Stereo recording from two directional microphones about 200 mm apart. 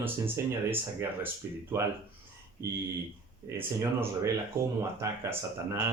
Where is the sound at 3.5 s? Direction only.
15° right (ahead or behind).